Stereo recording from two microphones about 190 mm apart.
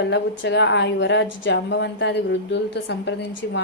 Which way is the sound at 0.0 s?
65° left (ahead or behind).